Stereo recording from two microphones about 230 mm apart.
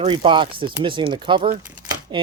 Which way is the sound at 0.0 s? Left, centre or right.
Right.